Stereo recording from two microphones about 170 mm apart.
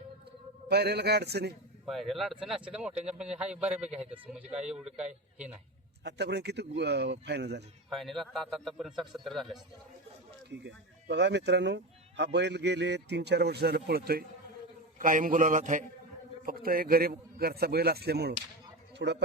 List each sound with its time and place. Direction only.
0.7 s a man's voice: 75° right (ahead or behind)
1.8 s a man's voice: centre (ahead or behind)
6.0 s speech: 85° right
7.9 s a man's voice: centre (ahead or behind)
10.5 s speech: 90° right; by 14.3 s 65° right (ahead or behind)
14.9 s a man's voice: 50° right (ahead or behind)
16.5 s a man's voice: 60° right (ahead or behind)
18.9 s speech: 90° right